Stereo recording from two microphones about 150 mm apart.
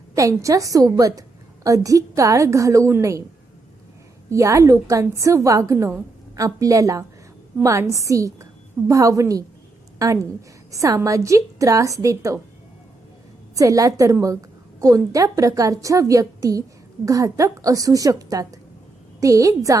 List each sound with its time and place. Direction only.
0.1 s a woman's voice: 20° right (ahead or behind)
4.3 s a woman's voice: 20° right (ahead or behind)
13.6 s a woman's voice: 20° right (ahead or behind)